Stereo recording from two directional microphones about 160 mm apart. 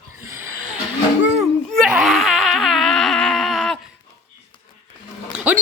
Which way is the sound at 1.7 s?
Centre (ahead or behind).